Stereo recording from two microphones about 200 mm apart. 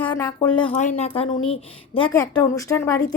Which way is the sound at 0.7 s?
35° left (ahead or behind).